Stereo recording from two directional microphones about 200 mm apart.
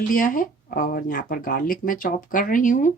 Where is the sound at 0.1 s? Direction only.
45° left (ahead or behind).